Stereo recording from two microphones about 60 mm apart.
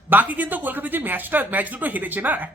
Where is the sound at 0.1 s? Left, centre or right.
Right.